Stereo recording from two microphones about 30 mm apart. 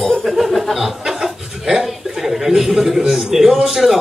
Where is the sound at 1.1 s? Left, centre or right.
Centre.